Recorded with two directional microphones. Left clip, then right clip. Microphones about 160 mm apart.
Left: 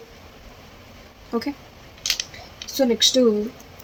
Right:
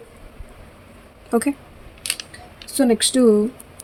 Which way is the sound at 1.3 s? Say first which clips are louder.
Right 6 dB; 90° right.